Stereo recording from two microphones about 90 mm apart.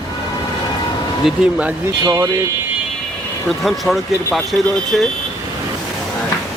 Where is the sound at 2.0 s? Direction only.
35° right (ahead or behind).